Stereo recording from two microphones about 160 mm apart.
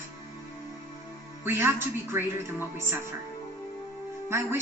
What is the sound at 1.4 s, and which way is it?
Music, 15° right (ahead or behind).